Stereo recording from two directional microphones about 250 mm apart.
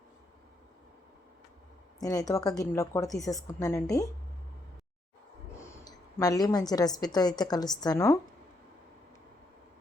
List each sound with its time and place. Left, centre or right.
2.0 s a woman's voice: centre
5.5 s a woman's voice: centre